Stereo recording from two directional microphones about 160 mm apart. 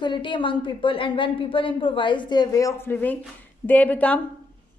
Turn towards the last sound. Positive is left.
turn(degrees=10)  # may be behind; listen again after turning